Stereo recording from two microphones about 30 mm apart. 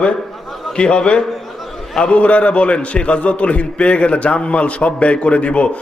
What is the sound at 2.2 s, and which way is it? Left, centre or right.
A man's voice, left.